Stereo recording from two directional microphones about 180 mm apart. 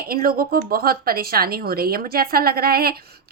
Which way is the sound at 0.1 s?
55° right (ahead or behind).